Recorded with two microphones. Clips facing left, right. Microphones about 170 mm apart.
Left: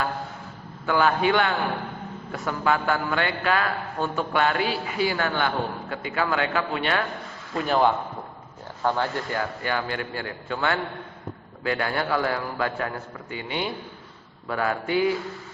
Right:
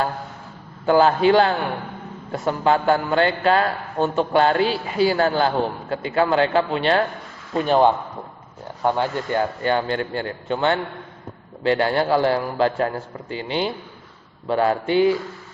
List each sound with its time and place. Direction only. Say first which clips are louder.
0.9 s a man's voice: right 6 dB; 30° right (ahead or behind)